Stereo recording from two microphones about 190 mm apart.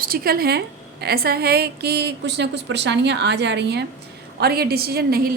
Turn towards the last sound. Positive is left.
turn(degrees=-55)  # may be behind; listen again after turning